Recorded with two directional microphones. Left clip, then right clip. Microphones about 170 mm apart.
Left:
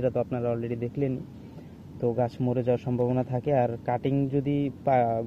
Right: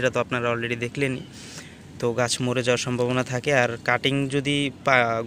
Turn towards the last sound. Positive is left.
turn(degrees=-5)  # may be behind; listen again after turning